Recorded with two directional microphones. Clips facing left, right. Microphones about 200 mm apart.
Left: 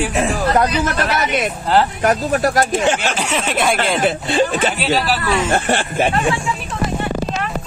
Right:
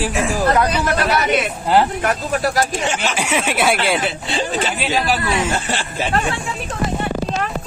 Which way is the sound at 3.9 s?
50° left (ahead or behind).